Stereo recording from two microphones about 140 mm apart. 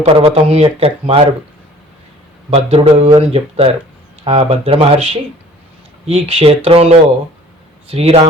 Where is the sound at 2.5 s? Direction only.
50° right (ahead or behind).